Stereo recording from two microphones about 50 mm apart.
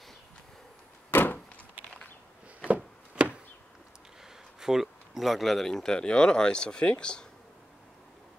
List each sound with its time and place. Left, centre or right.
1.1 s door: left
2.7 s chopping: right
4.6 s speech: centre